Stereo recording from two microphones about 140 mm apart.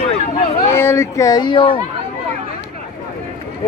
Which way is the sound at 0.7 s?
20° left (ahead or behind).